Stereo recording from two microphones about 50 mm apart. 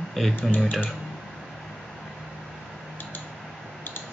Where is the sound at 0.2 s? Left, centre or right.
Centre.